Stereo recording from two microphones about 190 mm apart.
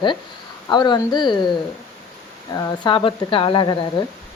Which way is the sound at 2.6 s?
20° left (ahead or behind).